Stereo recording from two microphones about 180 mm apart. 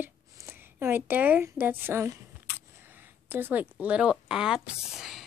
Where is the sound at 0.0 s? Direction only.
15° right (ahead or behind).